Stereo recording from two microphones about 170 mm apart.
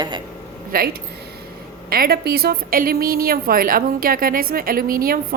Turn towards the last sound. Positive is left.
turn(degrees=-60)  # may be behind; listen again after turning